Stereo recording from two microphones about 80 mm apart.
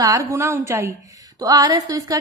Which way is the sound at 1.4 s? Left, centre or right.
Right.